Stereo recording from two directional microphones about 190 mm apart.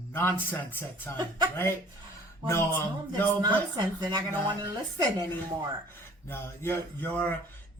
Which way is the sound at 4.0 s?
25° right (ahead or behind).